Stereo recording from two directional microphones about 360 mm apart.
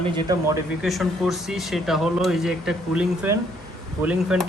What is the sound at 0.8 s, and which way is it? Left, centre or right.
Speech, centre.